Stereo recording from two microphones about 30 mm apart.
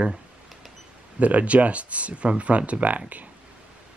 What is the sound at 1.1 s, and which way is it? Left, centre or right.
Speech, right.